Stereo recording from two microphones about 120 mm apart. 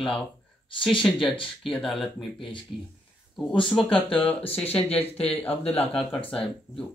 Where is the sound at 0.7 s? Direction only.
45° left (ahead or behind).